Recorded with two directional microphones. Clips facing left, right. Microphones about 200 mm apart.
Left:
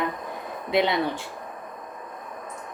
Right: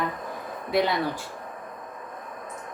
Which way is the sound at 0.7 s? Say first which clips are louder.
Left 1 dB; 20° left (ahead or behind).